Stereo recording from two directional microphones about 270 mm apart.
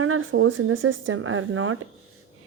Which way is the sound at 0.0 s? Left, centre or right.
Right.